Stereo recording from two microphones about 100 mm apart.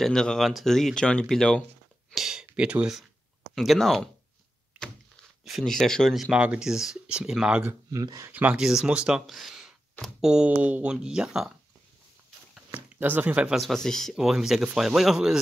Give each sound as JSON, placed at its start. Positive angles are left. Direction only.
{"t": 0.0, "sound": "speech", "side_deg": 5}
{"t": 2.1, "sound": "a sound", "side_deg": -5}
{"t": 3.5, "sound": "speech", "side_deg": 0}
{"t": 4.7, "sound": "a sound", "side_deg": 5}
{"t": 6.3, "sound": "speech", "side_deg": -10}
{"t": 7.9, "sound": "speech", "side_deg": -35}
{"t": 8.3, "sound": "speech", "side_deg": -15}
{"t": 8.5, "sound": "speech", "side_deg": -5}
{"t": 12.9, "sound": "speech", "side_deg": -15}
{"t": 13.6, "sound": "speech", "side_deg": 5}